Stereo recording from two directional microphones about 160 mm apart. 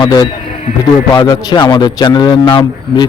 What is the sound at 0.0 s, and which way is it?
A man's voice, 25° left (ahead or behind).